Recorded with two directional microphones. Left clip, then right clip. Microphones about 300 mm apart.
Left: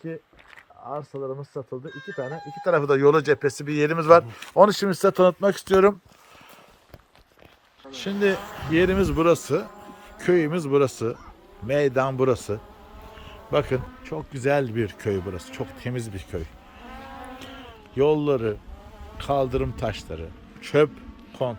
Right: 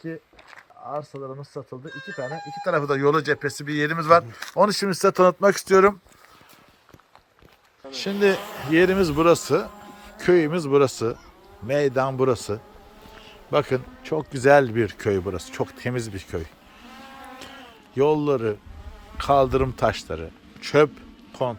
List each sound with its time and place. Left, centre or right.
0.9 s speech: centre
1.9 s speech: centre
2.1 s speech: centre
4.4 s a man's voice: centre
7.9 s speech: centre
8.4 s speech: right
8.7 s a man's voice: centre
13.2 s insect: centre
14.3 s speech: centre
17.9 s a man's voice: centre